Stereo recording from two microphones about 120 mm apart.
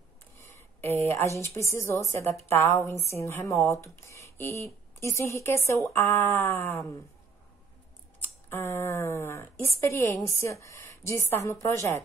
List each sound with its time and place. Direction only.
0.4 s a sound: 20° left (ahead or behind)
1.4 s a woman's voice: 20° left (ahead or behind)
8.5 s a woman's voice: 20° left (ahead or behind)